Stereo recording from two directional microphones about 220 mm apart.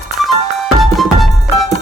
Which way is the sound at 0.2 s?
Centre (ahead or behind).